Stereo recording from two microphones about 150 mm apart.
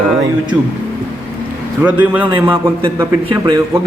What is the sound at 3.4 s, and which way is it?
Speech, 25° right (ahead or behind).